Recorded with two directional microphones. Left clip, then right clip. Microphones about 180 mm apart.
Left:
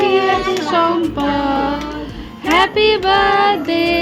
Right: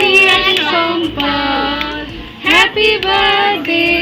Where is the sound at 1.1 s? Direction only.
20° left (ahead or behind).